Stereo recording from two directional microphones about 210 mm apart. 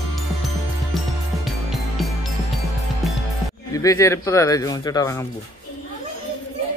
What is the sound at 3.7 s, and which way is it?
Speech, 15° left (ahead or behind).